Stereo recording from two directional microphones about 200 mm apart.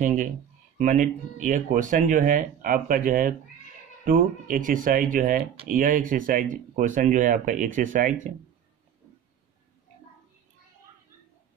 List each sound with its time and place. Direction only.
0.7 s speech: 40° right (ahead or behind)